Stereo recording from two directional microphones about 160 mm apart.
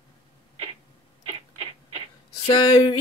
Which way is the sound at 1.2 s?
40° right (ahead or behind).